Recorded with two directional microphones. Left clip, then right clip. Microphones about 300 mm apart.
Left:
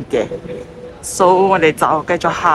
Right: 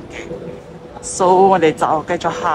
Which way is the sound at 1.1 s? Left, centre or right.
Centre.